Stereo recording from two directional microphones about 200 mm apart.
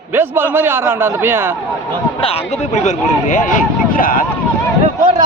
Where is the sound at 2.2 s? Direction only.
30° left (ahead or behind).